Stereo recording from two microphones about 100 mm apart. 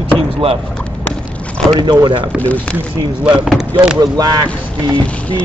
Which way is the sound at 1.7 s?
45° right (ahead or behind).